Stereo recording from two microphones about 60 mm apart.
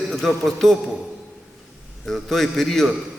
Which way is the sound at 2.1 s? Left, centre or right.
Centre.